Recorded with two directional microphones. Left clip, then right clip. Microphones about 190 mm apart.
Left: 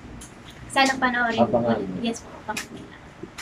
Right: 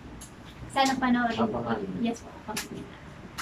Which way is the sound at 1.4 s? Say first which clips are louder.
Left 8 dB; 30° left (ahead or behind).